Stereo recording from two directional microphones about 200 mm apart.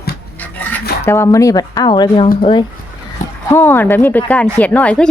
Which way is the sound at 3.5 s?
10° left (ahead or behind).